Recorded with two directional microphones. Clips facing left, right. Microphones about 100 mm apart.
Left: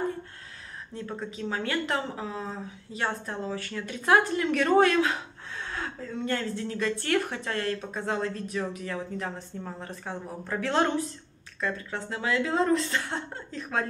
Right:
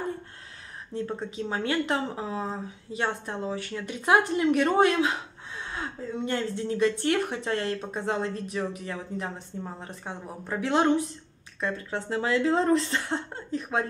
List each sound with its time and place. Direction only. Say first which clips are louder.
0.9 s a woman's voice: right 4 dB; 25° right (ahead or behind)
11.6 s a woman's voice: right 1 dB; 30° right (ahead or behind)